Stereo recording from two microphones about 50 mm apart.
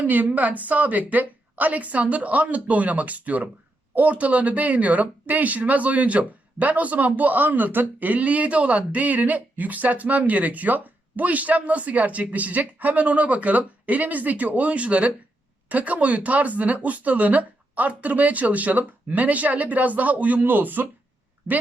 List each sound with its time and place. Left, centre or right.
0.0 s speech: right